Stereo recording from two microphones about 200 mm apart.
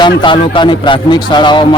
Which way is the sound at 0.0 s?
25° left (ahead or behind).